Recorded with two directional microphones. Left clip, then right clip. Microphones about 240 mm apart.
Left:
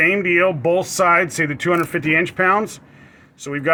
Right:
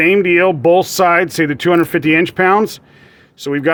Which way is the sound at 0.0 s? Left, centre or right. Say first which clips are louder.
Right 4 dB; right.